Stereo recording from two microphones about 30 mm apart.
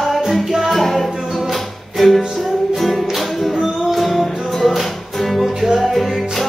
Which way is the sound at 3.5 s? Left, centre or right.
Centre.